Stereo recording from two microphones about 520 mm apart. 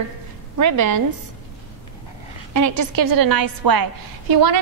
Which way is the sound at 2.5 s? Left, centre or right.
Right.